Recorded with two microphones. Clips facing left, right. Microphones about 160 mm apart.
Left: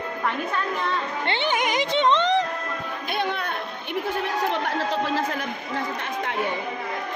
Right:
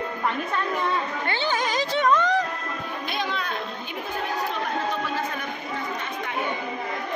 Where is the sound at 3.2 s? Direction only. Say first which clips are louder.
Left 3 dB; 60° left (ahead or behind).